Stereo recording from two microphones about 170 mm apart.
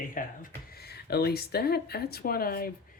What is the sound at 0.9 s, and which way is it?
Speech, 65° left (ahead or behind).